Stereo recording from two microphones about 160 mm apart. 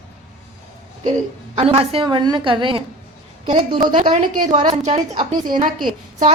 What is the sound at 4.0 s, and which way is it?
Speech, 45° right (ahead or behind).